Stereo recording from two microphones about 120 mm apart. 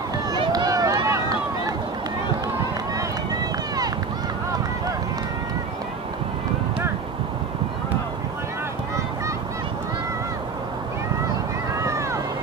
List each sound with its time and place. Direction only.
0.3 s run: 35° right (ahead or behind)
11.8 s vehicle: 25° right (ahead or behind)